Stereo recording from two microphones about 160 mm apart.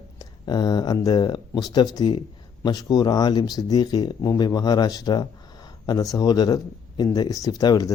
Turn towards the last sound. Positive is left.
turn(degrees=20)  # may be behind; listen again after turning